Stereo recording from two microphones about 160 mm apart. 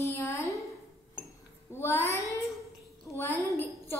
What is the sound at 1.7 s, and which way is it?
Child singing, 15° left (ahead or behind).